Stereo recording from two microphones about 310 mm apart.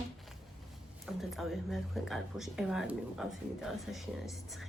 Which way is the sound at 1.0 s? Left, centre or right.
Centre.